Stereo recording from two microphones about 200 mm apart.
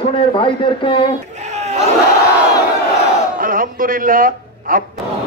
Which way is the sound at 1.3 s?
35° right (ahead or behind).